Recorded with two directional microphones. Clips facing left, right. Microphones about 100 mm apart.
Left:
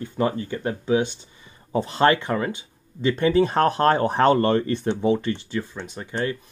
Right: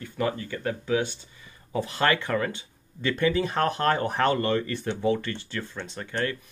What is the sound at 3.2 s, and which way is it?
Speech, 30° left (ahead or behind).